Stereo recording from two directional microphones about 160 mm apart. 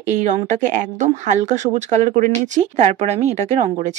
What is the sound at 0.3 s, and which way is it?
A woman's voice, 50° right (ahead or behind).